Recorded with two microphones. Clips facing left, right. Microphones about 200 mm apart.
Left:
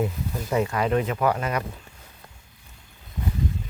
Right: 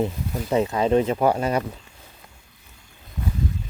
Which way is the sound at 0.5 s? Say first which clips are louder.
Right 4 dB; 25° right (ahead or behind).